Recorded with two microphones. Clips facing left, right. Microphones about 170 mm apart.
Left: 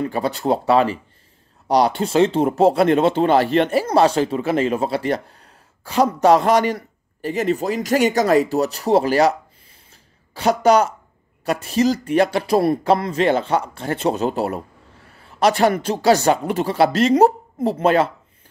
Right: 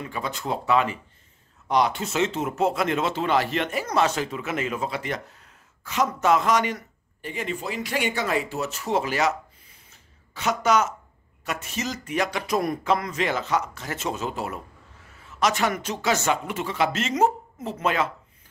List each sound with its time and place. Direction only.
0.0 s speech: 35° left (ahead or behind)
9.8 s a sound: 35° left (ahead or behind)
11.4 s speech: 35° left (ahead or behind)